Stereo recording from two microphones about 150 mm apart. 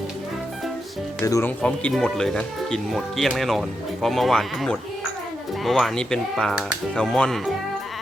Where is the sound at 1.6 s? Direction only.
10° left (ahead or behind).